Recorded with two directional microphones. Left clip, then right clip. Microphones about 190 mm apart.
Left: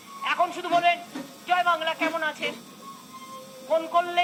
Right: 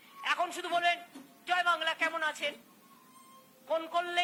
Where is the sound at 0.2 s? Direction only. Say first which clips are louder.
Left 7 dB; 35° right (ahead or behind).